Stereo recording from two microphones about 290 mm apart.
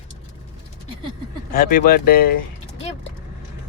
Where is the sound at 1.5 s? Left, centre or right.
Left.